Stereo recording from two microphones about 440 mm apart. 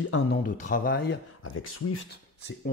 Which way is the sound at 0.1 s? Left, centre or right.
Centre.